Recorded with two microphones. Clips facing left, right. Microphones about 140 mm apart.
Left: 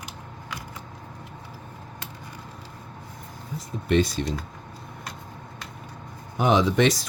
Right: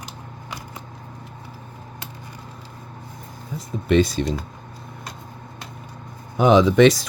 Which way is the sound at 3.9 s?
90° right.